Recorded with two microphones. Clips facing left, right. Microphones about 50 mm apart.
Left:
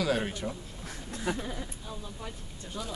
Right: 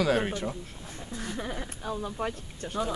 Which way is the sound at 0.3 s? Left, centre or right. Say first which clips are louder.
Right 3 dB; right.